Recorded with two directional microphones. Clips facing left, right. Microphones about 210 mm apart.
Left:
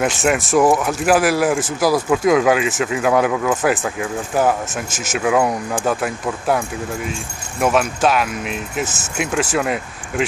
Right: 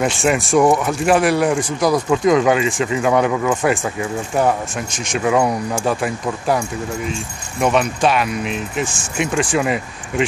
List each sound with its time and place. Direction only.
0.0 s speech: centre (ahead or behind)
7.6 s speech: 5° left (ahead or behind)